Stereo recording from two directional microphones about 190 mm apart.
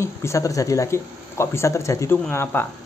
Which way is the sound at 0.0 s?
15° left (ahead or behind).